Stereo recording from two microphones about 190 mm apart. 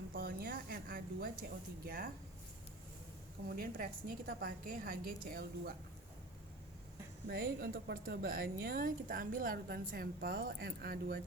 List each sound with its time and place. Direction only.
0.1 s a sound: 50° right (ahead or behind)
3.5 s a woman's voice: 50° right (ahead or behind)
7.3 s a woman's voice: 50° right (ahead or behind)